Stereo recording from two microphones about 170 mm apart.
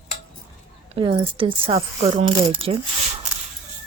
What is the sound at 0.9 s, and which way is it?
Speech, 30° right (ahead or behind).